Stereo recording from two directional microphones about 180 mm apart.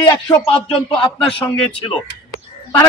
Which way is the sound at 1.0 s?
30° left (ahead or behind).